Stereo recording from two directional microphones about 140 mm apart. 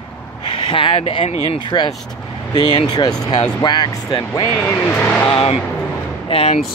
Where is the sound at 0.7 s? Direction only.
35° left (ahead or behind).